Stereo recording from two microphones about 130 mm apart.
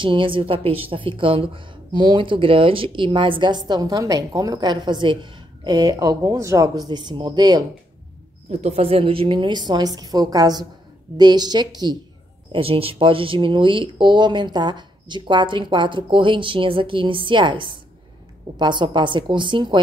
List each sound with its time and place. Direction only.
0.0 s a woman's voice: 40° right (ahead or behind)
8.5 s a woman's voice: 55° right (ahead or behind); by 12.0 s 30° right (ahead or behind)
12.5 s a woman's voice: 45° right (ahead or behind)